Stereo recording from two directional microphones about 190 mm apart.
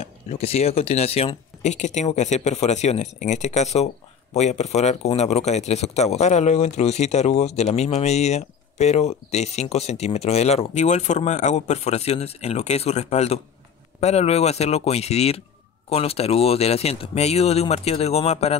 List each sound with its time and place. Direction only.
0.0 s speech: 35° left (ahead or behind)